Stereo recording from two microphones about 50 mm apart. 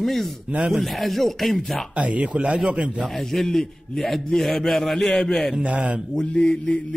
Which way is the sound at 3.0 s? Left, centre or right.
Centre.